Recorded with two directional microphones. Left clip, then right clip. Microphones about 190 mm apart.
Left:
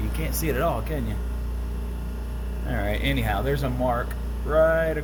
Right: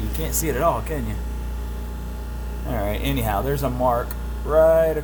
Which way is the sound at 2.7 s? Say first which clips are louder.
Right 1 dB; 20° right (ahead or behind).